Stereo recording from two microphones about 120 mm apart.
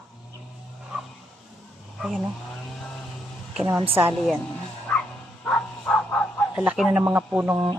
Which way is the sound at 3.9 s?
15° right (ahead or behind).